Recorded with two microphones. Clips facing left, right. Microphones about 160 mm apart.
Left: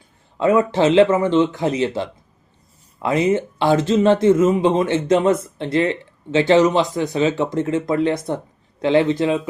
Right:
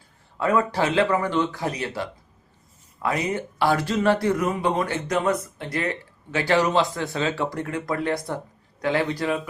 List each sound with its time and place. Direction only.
0.3 s speech: 20° left (ahead or behind)